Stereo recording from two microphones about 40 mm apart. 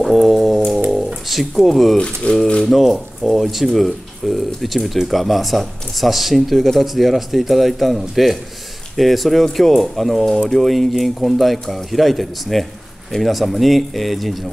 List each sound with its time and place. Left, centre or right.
0.0 s music: centre
0.9 s a sound: centre
2.0 s speech: left
2.6 s speech: centre